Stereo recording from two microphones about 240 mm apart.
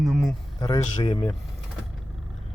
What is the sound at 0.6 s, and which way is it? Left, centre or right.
Speech, centre.